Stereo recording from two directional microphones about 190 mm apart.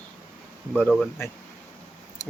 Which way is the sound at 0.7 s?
5° left (ahead or behind).